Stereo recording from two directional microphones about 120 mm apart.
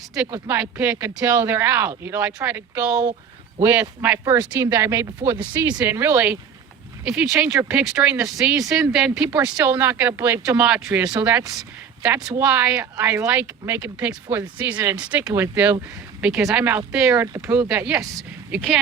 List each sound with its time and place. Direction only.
0.4 s speech: 15° right (ahead or behind)
18.2 s speech: 5° right (ahead or behind)